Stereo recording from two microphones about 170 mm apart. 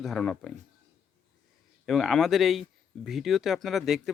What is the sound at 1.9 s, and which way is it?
Speech, centre (ahead or behind).